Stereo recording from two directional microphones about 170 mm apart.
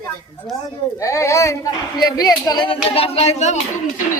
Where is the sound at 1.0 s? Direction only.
20° left (ahead or behind); by 3.6 s 40° left (ahead or behind).